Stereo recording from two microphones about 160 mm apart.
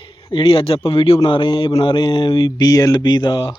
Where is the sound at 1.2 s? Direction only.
30° left (ahead or behind).